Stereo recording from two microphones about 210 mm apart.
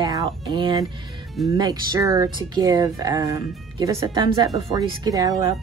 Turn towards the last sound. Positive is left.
turn(degrees=-20)  # may be behind; listen again after turning